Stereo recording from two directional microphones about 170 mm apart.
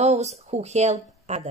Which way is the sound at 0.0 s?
40° right (ahead or behind).